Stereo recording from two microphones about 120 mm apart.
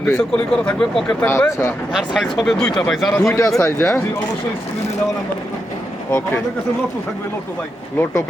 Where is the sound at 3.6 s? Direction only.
20° left (ahead or behind).